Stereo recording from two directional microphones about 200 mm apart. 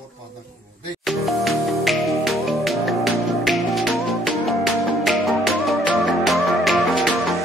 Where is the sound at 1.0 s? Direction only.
Centre (ahead or behind).